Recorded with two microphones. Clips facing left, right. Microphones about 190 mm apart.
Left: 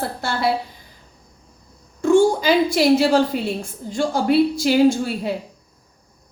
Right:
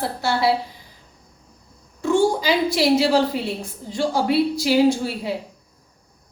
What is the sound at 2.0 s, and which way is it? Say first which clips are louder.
A woman's voice: left 4 dB; 50° left (ahead or behind).